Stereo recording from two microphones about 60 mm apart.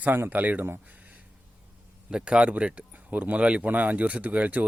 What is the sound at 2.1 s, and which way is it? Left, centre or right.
Speech, centre.